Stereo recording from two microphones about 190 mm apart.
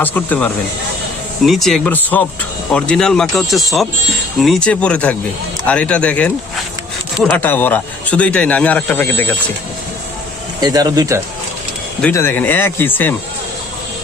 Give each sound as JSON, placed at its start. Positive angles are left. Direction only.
{"t": 0.0, "sound": "speech", "side_deg": 10}
{"t": 10.6, "sound": "speech", "side_deg": -20}
{"t": 12.0, "sound": "speech", "side_deg": 10}